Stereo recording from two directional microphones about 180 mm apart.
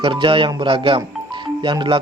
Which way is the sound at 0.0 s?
30° right (ahead or behind).